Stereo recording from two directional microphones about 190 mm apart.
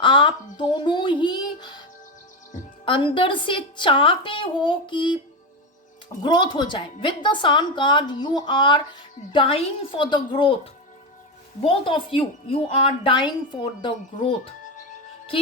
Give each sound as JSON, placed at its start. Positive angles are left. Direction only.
{"t": 0.0, "sound": "a sound", "side_deg": 25}
{"t": 2.8, "sound": "a woman's voice", "side_deg": 25}
{"t": 6.2, "sound": "a woman's voice", "side_deg": 25}
{"t": 11.6, "sound": "a woman's voice", "side_deg": 30}